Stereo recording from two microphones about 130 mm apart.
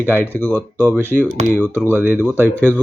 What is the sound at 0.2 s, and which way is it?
Speech, 15° left (ahead or behind).